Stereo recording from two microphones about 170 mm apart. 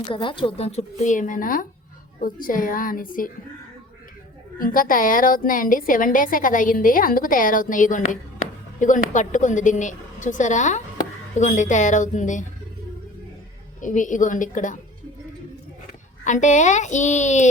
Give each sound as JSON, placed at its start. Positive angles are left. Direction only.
{"t": 0.1, "sound": "a woman's voice", "side_deg": 30}
{"t": 4.5, "sound": "a woman's voice", "side_deg": 55}
{"t": 13.8, "sound": "a woman's voice", "side_deg": 50}
{"t": 16.2, "sound": "a woman's voice", "side_deg": 45}